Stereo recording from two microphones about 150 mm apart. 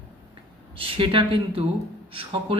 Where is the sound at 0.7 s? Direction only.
35° right (ahead or behind).